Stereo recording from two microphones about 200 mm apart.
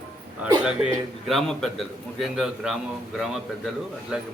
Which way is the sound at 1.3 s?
Centre (ahead or behind).